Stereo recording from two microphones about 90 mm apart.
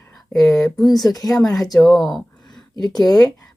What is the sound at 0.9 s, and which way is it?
Speech, 45° left (ahead or behind).